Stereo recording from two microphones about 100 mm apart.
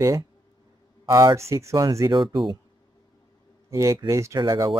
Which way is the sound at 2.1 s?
50° right (ahead or behind).